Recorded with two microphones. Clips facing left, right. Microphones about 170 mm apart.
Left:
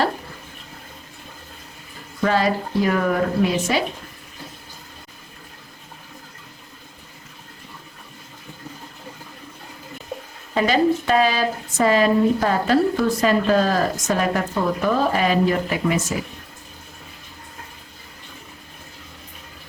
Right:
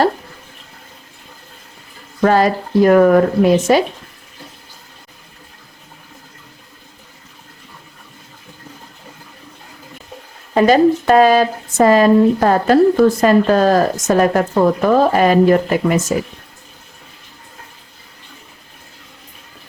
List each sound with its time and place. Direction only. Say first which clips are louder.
2.2 s speech: right 6 dB; 50° right (ahead or behind)
10.5 s speech: right 7 dB; 45° right (ahead or behind)